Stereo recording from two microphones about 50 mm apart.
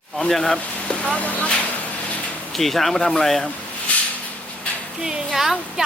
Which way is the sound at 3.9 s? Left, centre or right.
Left.